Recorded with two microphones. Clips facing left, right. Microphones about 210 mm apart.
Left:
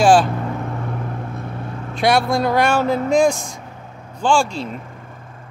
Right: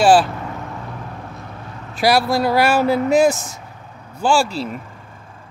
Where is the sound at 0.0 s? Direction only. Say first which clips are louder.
Even; centre (ahead or behind).